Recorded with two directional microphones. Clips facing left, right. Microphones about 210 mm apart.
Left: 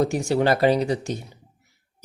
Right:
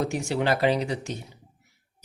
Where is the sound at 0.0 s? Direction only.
35° left (ahead or behind).